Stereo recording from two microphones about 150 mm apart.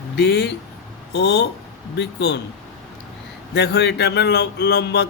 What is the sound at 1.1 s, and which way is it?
Speech, 90° left.